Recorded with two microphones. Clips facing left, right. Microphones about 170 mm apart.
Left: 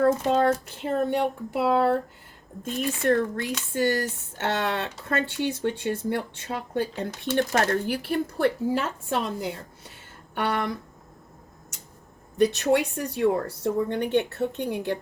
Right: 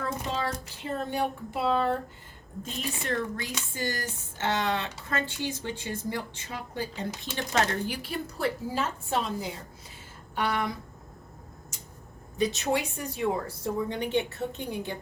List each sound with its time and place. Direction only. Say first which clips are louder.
0.0 s speech: left 11 dB; 50° left (ahead or behind); by 1.9 s 75° left (ahead or behind)
2.7 s speech: left 9 dB; 55° left (ahead or behind)
12.4 s speech: left 6 dB; 65° left (ahead or behind)